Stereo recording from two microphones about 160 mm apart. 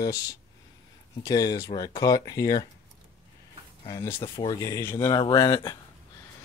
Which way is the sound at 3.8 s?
20° left (ahead or behind).